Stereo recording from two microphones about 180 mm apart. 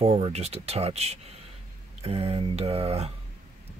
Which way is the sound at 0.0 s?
35° right (ahead or behind).